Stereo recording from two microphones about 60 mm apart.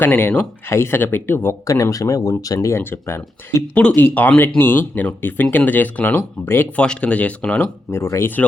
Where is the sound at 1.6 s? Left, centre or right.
Left.